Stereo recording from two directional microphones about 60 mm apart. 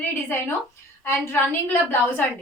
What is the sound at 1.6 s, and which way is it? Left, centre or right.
Speech, left.